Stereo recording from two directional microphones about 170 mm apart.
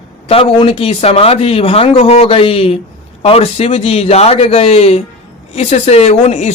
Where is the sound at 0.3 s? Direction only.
35° left (ahead or behind).